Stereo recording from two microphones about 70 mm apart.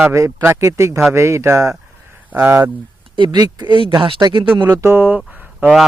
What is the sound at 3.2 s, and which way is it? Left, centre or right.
Speech, right.